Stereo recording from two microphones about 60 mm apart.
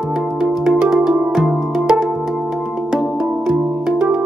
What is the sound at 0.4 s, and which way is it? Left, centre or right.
Music, centre.